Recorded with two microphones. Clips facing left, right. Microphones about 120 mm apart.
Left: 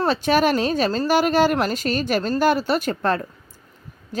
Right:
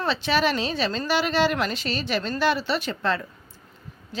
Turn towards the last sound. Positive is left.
turn(degrees=45)  # may be behind; listen again after turning